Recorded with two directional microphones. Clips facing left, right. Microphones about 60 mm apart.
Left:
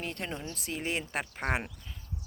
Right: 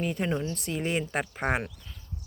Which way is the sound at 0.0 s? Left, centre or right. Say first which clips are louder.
Right 8 dB; centre.